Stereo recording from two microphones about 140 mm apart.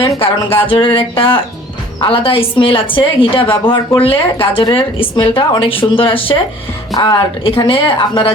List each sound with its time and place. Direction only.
0.2 s a woman's voice: 40° left (ahead or behind)